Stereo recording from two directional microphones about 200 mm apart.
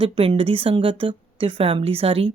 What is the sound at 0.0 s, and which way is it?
A woman's voice, 25° right (ahead or behind).